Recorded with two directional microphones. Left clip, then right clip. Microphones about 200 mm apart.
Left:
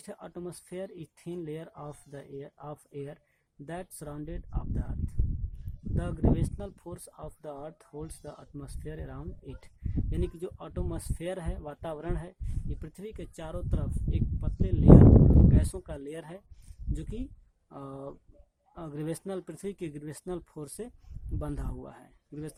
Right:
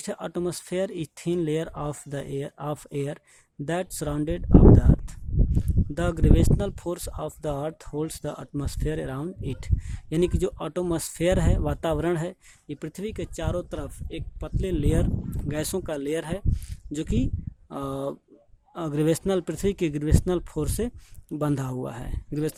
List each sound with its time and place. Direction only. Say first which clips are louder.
0.0 s speech: right 12 dB; 40° right (ahead or behind)